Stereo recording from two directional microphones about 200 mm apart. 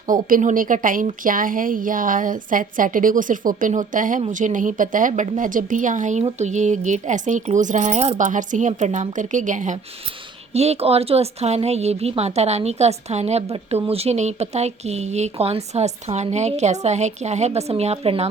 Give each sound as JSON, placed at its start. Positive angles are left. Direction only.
{"t": 0.1, "sound": "speech", "side_deg": -45}